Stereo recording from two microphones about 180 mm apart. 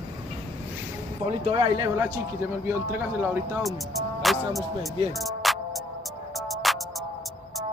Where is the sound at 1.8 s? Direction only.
20° right (ahead or behind).